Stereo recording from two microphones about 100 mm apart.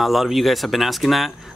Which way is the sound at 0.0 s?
Centre (ahead or behind).